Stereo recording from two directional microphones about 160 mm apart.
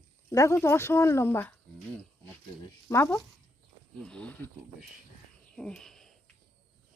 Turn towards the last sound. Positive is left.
turn(degrees=0)  # may be behind; listen again after turning